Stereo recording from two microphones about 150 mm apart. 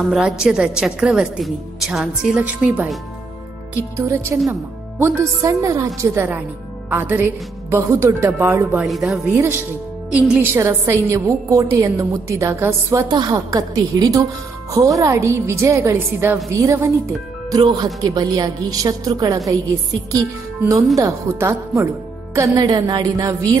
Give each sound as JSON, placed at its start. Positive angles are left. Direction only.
{"t": 0.1, "sound": "a woman's voice", "side_deg": -5}
{"t": 3.9, "sound": "a woman's voice", "side_deg": -20}
{"t": 8.8, "sound": "a woman's voice", "side_deg": 0}